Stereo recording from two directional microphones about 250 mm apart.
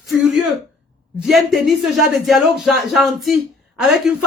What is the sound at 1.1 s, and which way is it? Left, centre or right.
A man's voice, centre.